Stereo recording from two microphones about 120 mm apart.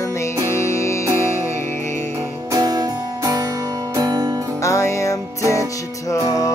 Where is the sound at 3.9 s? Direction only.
30° right (ahead or behind).